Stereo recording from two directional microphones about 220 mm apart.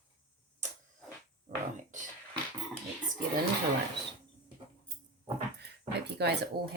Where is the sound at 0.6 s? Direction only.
30° right (ahead or behind).